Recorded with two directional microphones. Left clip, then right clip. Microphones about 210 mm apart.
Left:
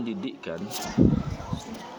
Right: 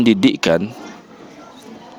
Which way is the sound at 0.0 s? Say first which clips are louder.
Right 19 dB; 50° right (ahead or behind).